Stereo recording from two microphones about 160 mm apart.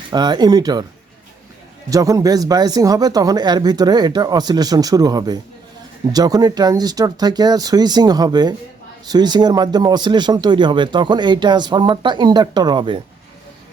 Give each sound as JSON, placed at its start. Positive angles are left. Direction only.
{"t": 0.1, "sound": "speech", "side_deg": -25}
{"t": 1.9, "sound": "speech", "side_deg": -20}